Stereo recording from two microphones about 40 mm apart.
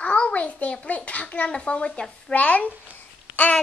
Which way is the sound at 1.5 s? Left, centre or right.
Left.